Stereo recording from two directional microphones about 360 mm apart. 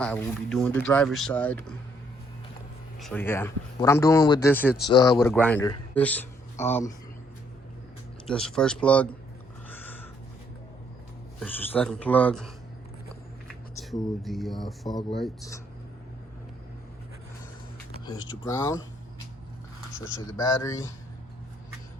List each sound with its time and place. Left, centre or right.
0.0 s speech: centre
3.0 s a man's voice: centre
8.3 s speech: centre
9.6 s a sound: centre
11.3 s speech: centre
13.7 s speech: centre
18.0 s a man's voice: centre
20.2 s a man's voice: centre